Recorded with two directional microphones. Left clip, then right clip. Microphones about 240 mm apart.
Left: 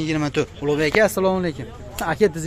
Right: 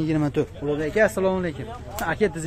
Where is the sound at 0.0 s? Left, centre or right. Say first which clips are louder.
Left 1 dB; centre.